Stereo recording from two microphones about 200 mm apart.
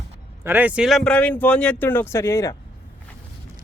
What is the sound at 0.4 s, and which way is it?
Speech, 10° right (ahead or behind).